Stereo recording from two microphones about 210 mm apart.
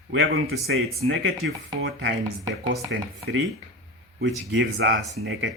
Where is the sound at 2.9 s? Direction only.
60° right (ahead or behind).